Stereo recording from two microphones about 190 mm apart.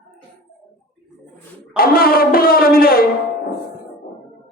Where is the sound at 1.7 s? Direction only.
50° left (ahead or behind).